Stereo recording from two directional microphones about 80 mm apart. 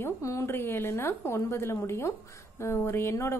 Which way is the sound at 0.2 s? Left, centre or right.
Left.